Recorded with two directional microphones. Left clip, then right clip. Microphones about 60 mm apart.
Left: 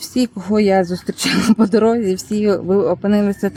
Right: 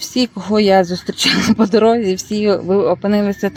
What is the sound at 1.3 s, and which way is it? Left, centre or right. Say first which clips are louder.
Speech: right 1 dB; left.